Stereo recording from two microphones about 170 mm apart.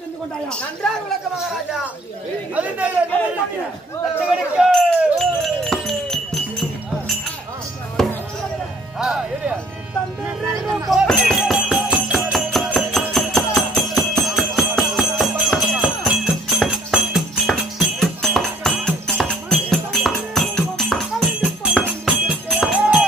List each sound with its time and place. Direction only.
2.5 s speech: 10° right (ahead or behind)
4.6 s a sound: centre (ahead or behind)
8.0 s chop: centre (ahead or behind)
10.2 s a sound: 20° right (ahead or behind)
10.7 s jingle bell: centre (ahead or behind)
21.7 s music: 5° right (ahead or behind)